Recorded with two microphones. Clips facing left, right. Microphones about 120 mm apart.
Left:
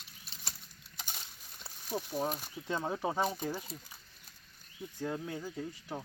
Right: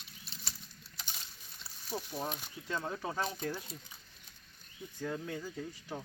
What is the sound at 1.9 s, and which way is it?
Speech, 15° left (ahead or behind).